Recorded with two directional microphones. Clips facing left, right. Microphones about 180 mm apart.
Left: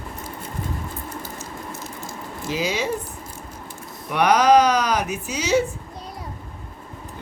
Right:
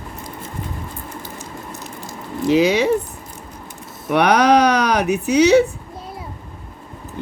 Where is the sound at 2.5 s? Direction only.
65° right (ahead or behind).